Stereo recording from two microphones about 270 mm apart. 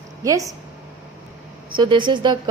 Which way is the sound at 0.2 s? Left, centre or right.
Centre.